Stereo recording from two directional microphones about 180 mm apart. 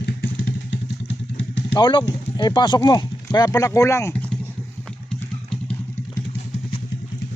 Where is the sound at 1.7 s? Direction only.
25° left (ahead or behind).